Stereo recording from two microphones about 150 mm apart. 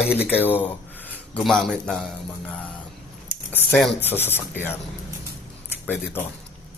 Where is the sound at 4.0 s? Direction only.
15° left (ahead or behind).